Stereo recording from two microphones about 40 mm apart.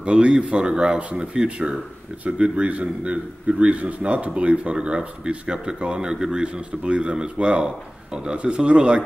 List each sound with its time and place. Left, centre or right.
0.0 s speech: right